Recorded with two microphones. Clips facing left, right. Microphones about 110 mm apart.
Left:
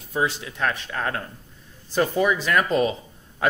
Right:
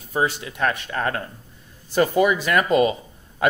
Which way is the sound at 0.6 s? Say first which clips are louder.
Right 3 dB; 55° right (ahead or behind).